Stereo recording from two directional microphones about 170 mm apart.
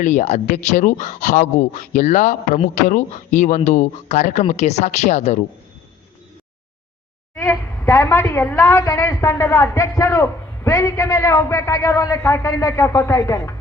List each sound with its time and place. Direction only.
0.0 s speech: 45° left (ahead or behind)
7.3 s a woman's voice: 15° left (ahead or behind)